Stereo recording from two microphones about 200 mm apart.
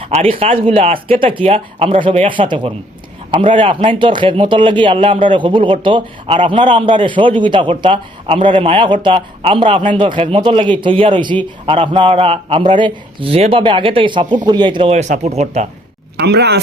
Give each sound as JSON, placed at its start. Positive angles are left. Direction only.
{"t": 0.0, "sound": "speech", "side_deg": -30}
{"t": 16.1, "sound": "speech", "side_deg": -55}